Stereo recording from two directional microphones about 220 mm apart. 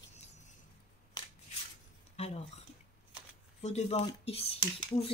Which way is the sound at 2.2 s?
30° left (ahead or behind).